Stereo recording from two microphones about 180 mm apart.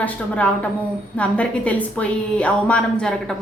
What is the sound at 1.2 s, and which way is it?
A woman's voice, 5° left (ahead or behind).